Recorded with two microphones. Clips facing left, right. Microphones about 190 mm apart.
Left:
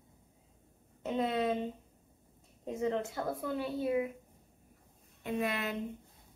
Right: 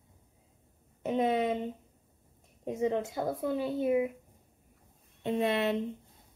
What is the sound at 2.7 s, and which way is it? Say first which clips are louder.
Speech: right 3 dB; 20° right (ahead or behind).